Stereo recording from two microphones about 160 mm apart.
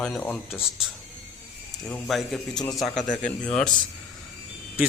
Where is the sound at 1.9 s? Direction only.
Centre (ahead or behind).